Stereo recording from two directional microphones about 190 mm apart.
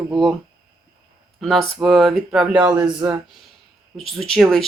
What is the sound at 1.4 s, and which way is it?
Speech, centre (ahead or behind).